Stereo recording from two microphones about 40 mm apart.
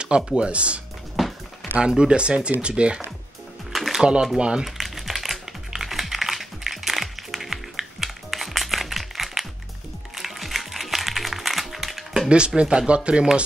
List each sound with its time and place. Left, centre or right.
0.4 s speech: right
1.1 s music: centre
1.8 s speech: right
3.7 s music: centre
4.0 s speech: centre
4.6 s typing: centre
5.8 s music: centre
12.3 s speech: right